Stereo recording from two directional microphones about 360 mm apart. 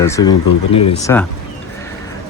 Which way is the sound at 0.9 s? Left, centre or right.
Centre.